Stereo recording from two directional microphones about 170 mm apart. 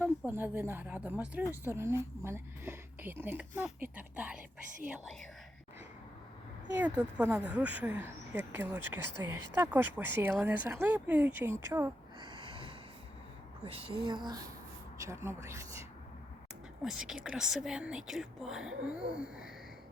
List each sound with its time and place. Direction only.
0.0 s a woman's voice: 10° right (ahead or behind)
6.7 s a woman's voice: 10° right (ahead or behind)
12.2 s snort: 30° right (ahead or behind)
13.7 s a woman's voice: 35° right (ahead or behind); by 15.6 s 15° right (ahead or behind)
16.8 s a woman's voice: 5° right (ahead or behind)